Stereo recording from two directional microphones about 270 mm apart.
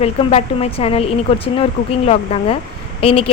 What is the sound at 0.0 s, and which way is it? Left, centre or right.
Speech, left.